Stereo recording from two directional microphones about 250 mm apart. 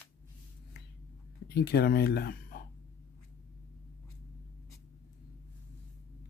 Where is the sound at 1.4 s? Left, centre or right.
Left.